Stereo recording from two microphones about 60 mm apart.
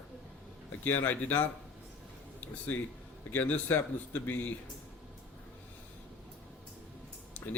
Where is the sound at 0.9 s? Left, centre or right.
Left.